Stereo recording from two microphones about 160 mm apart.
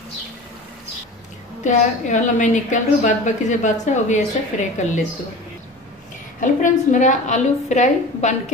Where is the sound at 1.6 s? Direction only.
50° left (ahead or behind).